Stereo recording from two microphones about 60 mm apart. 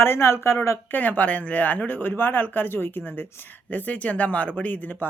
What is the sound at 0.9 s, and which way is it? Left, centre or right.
Speech, left.